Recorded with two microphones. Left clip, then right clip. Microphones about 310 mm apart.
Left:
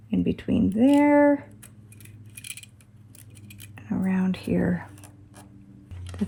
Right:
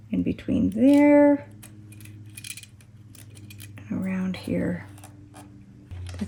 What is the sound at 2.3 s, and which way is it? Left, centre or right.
Scissors, centre.